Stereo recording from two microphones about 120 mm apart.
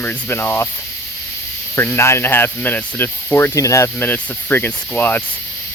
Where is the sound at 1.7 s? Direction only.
20° left (ahead or behind).